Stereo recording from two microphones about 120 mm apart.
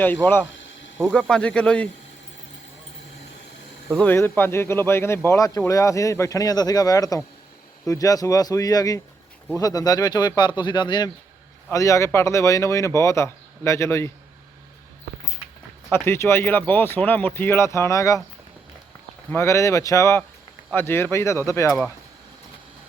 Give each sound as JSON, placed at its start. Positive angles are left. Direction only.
{"t": 0.0, "sound": "speech", "side_deg": 15}
{"t": 3.9, "sound": "speech", "side_deg": 15}
{"t": 11.7, "sound": "speech", "side_deg": 25}
{"t": 15.9, "sound": "speech", "side_deg": 20}
{"t": 19.3, "sound": "speech", "side_deg": 25}